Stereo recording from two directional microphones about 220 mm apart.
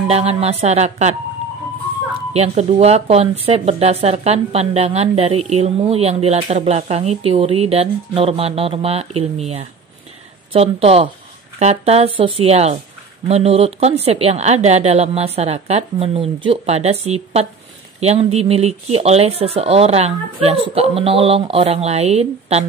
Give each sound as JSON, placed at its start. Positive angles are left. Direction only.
{"t": 0.1, "sound": "speech", "side_deg": -30}
{"t": 2.3, "sound": "a woman's voice", "side_deg": -30}